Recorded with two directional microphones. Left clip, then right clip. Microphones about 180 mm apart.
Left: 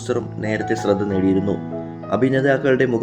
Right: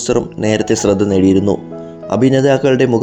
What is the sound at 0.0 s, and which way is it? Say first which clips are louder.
Speech: right 8 dB; 35° right (ahead or behind).